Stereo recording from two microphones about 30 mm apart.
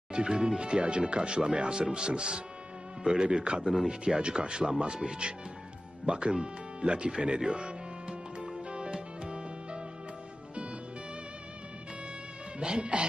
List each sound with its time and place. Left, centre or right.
0.1 s speech: right
7.6 s music: right
12.5 s speech: right